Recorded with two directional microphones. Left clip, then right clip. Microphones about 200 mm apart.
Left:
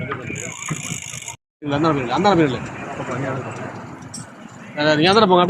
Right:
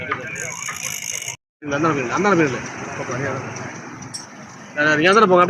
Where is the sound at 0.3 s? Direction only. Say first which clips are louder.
Right 2 dB; 60° left (ahead or behind).